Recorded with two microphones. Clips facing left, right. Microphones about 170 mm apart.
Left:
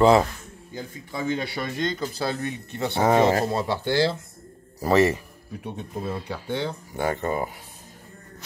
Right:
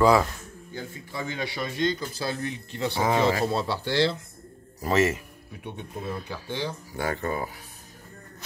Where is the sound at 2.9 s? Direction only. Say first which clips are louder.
Left 5 dB; 45° left (ahead or behind).